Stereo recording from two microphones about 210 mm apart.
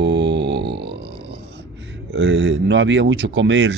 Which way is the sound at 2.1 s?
60° right (ahead or behind).